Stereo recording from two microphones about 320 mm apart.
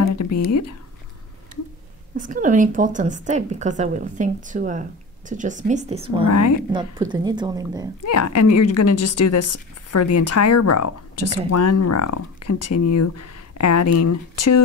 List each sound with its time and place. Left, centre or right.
0.0 s a sound: left
2.1 s a woman's voice: right
6.2 s speech: left
6.7 s speech: centre
8.0 s speech: left